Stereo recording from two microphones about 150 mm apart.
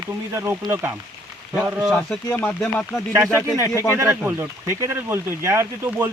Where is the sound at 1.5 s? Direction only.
5° right (ahead or behind).